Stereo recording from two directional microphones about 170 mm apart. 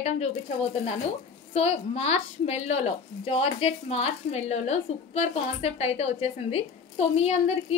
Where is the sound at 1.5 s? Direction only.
40° left (ahead or behind).